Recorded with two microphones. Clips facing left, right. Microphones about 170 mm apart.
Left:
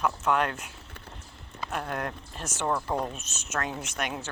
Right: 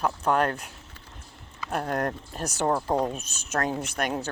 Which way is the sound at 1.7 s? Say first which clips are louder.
Right 5 dB; 45° right (ahead or behind).